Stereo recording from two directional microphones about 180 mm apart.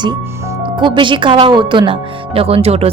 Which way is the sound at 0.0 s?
20° right (ahead or behind).